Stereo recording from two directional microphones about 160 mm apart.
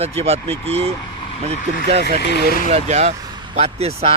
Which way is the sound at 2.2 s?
85° left.